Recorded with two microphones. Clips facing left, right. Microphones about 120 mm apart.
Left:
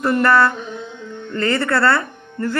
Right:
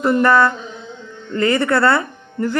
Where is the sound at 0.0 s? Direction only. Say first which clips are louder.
Right 1 dB; 15° right (ahead or behind).